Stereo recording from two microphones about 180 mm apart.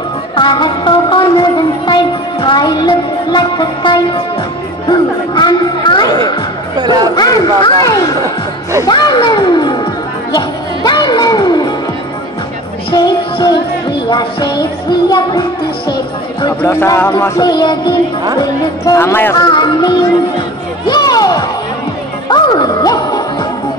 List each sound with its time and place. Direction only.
0.4 s music: 25° left (ahead or behind)
6.9 s chatter: 25° left (ahead or behind)
8.8 s music: 25° left (ahead or behind)
12.9 s music: 20° left (ahead or behind)
16.6 s music: 15° left (ahead or behind)